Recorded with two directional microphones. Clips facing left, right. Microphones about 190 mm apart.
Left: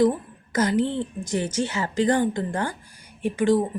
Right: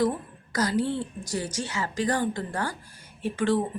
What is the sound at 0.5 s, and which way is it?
A woman's voice, 20° left (ahead or behind).